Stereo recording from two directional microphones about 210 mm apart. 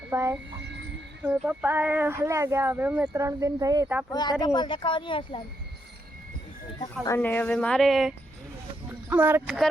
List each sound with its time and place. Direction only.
0.1 s speech: 15° right (ahead or behind)
4.1 s speech: 20° left (ahead or behind)
7.0 s speech: 10° left (ahead or behind); by 9.6 s 5° right (ahead or behind)